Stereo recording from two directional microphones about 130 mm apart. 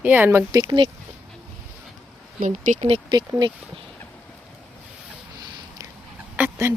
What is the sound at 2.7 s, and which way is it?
Speech, 75° right (ahead or behind).